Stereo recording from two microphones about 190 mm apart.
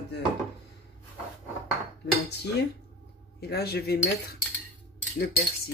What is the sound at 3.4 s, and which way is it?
Speech, 55° left (ahead or behind).